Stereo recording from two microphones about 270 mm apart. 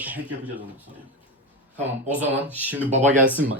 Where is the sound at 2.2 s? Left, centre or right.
Centre.